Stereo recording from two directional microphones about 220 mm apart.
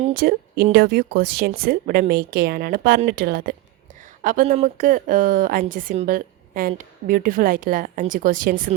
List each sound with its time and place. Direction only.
0.1 s a woman's voice: 40° right (ahead or behind)